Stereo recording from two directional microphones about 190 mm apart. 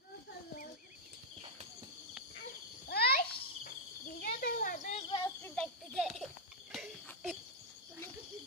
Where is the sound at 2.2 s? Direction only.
Centre (ahead or behind).